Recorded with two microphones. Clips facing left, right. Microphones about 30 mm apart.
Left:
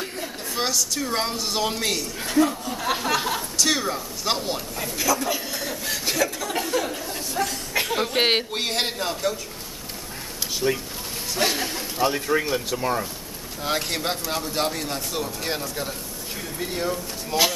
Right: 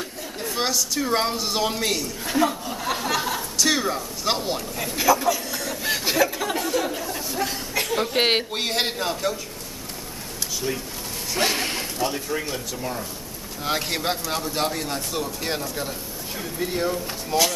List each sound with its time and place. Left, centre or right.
0.6 s a man's voice: centre
4.8 s speech: centre
5.5 s snicker: centre
5.9 s chuckle: centre
6.5 s a sound: centre
7.8 s a man's voice: centre
10.6 s speech: left
11.5 s a man's voice: right
12.0 s speech: left
13.7 s a man's voice: centre